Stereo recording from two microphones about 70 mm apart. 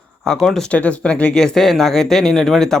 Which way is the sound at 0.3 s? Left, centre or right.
Centre.